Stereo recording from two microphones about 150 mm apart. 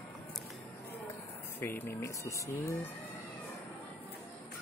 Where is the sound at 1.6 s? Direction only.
15° left (ahead or behind).